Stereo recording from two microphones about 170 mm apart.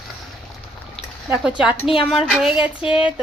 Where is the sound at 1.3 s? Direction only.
5° right (ahead or behind).